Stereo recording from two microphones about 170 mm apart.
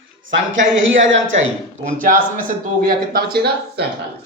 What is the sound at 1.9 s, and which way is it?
Speech, 50° right (ahead or behind).